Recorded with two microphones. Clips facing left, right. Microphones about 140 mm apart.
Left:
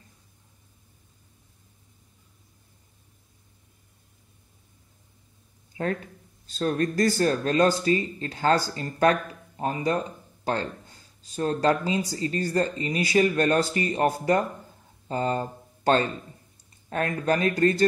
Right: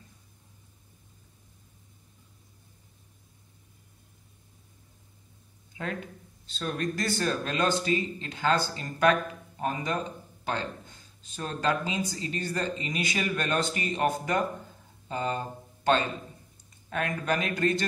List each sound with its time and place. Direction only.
6.4 s speech: 40° left (ahead or behind)